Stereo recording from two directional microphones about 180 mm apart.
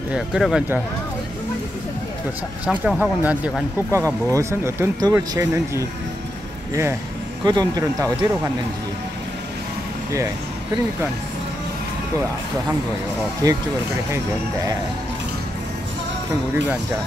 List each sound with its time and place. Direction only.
0.1 s speech: 5° right (ahead or behind)
2.6 s speech: 5° right (ahead or behind)
13.4 s speech: 20° right (ahead or behind)